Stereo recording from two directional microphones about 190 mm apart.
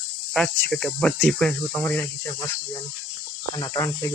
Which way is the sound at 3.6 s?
15° left (ahead or behind).